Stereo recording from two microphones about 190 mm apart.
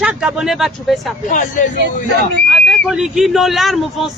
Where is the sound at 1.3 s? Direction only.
40° left (ahead or behind).